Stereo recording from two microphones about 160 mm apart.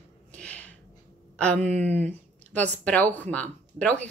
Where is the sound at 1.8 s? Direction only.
45° right (ahead or behind).